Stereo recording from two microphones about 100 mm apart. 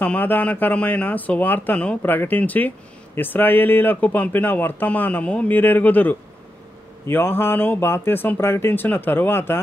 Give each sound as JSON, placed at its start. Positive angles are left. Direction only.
{"t": 0.0, "sound": "speech", "side_deg": 15}